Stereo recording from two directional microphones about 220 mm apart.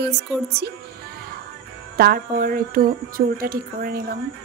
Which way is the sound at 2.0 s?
45° right (ahead or behind).